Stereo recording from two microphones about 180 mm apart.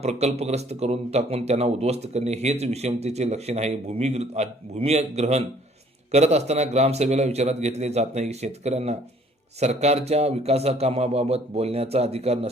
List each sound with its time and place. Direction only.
0.0 s a man's voice: 35° right (ahead or behind)